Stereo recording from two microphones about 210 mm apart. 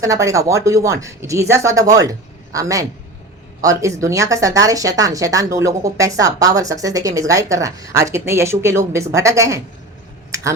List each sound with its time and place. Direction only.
0.0 s speech: 15° right (ahead or behind)